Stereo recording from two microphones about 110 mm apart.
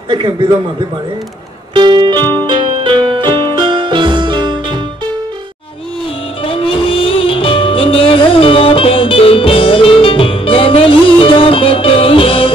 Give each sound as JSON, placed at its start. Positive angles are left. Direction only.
{"t": 0.1, "sound": "music", "side_deg": -45}
{"t": 1.7, "sound": "music", "side_deg": -45}
{"t": 6.4, "sound": "music", "side_deg": 55}